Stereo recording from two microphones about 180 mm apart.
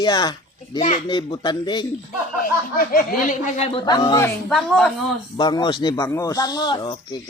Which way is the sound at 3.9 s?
20° left (ahead or behind).